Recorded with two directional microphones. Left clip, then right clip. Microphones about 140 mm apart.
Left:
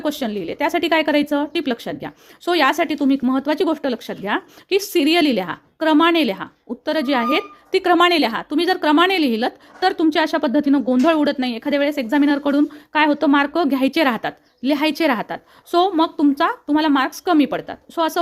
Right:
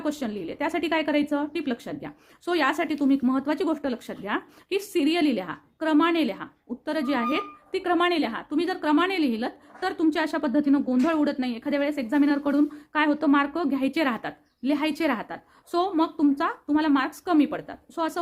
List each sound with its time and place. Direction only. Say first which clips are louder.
0.0 s a woman's voice: left 7 dB; 35° left (ahead or behind)